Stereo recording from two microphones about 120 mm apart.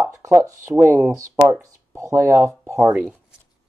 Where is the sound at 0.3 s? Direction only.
25° right (ahead or behind).